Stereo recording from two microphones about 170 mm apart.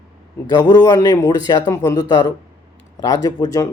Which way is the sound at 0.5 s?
25° left (ahead or behind).